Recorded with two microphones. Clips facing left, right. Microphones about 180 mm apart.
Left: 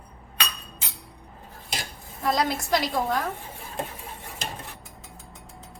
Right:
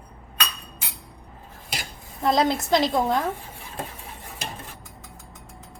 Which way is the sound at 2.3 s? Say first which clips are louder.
Right 4 dB; 25° right (ahead or behind).